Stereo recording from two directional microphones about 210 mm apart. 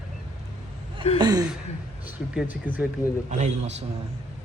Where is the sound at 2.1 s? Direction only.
10° right (ahead or behind).